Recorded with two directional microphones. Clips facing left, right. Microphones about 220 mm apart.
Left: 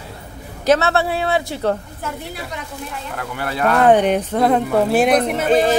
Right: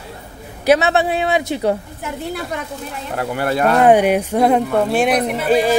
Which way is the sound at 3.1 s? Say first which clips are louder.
Right 8 dB; 40° right (ahead or behind).